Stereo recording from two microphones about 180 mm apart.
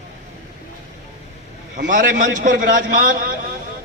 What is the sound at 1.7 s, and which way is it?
A man's voice, 45° right (ahead or behind).